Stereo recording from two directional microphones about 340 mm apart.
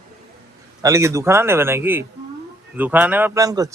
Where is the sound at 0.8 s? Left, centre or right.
Centre.